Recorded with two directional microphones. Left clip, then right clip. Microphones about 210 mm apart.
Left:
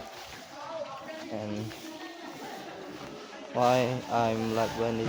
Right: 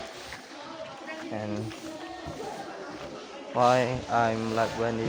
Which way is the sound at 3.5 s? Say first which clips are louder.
Right 2 dB; 10° left (ahead or behind).